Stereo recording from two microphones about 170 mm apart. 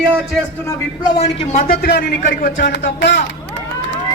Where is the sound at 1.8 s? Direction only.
65° left (ahead or behind); by 3.2 s 85° left.